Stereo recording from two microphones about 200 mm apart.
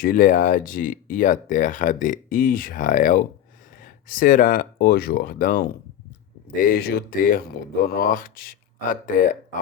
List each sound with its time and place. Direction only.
0.0 s speech: 45° left (ahead or behind)